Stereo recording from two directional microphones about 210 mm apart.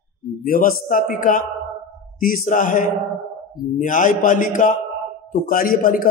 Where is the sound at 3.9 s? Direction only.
40° left (ahead or behind).